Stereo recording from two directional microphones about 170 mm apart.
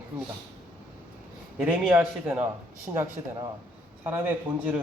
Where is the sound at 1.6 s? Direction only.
10° right (ahead or behind).